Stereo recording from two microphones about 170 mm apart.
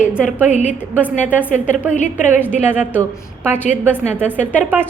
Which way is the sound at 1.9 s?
45° left (ahead or behind).